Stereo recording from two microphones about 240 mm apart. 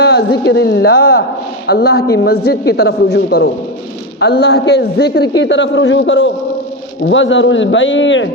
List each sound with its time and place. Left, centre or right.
0.0 s a woman's voice: left